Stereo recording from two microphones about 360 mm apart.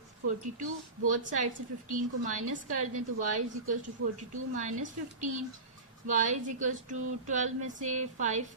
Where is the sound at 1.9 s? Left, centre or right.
Right.